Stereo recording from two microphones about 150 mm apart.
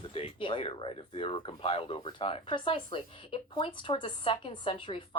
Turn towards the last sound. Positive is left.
turn(degrees=35)  # may be behind; listen again after turning